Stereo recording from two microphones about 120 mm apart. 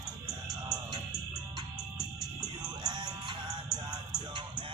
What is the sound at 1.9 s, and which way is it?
Music, 5° right (ahead or behind).